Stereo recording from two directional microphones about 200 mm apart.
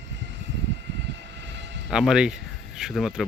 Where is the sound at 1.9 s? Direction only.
5° right (ahead or behind).